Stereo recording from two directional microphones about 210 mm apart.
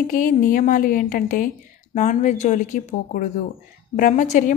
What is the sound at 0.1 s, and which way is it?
A woman's voice, 40° left (ahead or behind).